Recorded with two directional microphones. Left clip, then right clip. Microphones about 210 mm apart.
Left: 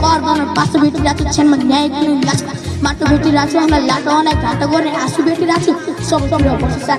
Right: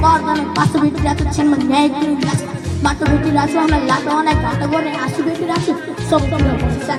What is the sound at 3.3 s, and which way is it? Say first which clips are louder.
Music: left 2 dB; 30° left (ahead or behind).